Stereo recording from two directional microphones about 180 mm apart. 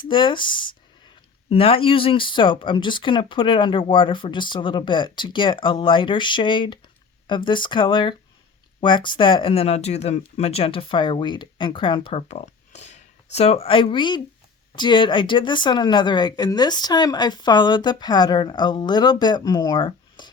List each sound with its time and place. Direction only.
0.1 s speech: 25° left (ahead or behind)